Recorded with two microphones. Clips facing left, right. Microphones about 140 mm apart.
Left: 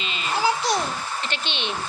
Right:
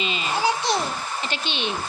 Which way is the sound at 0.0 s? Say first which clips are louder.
Right 4 dB; 20° right (ahead or behind).